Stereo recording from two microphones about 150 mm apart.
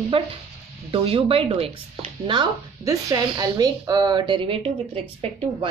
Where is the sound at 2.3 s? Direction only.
25° right (ahead or behind).